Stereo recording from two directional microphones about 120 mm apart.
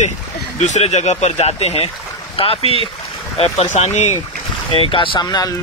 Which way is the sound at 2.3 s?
50° left (ahead or behind).